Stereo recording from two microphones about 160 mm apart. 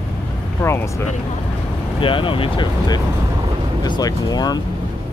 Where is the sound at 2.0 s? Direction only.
30° left (ahead or behind).